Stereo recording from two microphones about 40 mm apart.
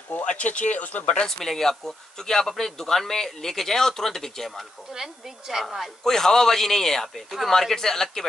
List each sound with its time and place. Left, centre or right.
0.2 s speech: left
1.0 s speech: left
1.4 s speech: centre
4.9 s speech: centre
6.0 s speech: centre